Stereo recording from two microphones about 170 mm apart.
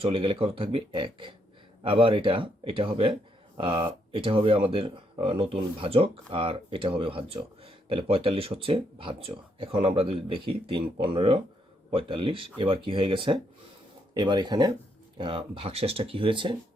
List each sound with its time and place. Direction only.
0.0 s speech: 30° right (ahead or behind)